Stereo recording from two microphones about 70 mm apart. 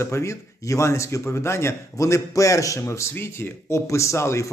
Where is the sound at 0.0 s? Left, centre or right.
Left.